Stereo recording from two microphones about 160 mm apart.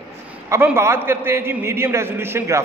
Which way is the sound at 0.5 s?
15° right (ahead or behind).